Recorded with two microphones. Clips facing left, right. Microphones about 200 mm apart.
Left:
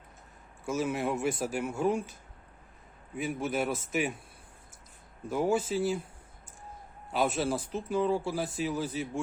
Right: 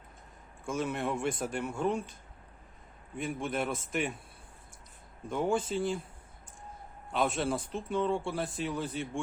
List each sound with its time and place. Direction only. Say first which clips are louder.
0.6 s a man's voice: left 2 dB; 5° left (ahead or behind)
3.2 s a man's voice: left 2 dB; 5° left (ahead or behind)
5.3 s a man's voice: left 2 dB; 5° left (ahead or behind)
7.1 s a man's voice: left 1 dB; 5° left (ahead or behind)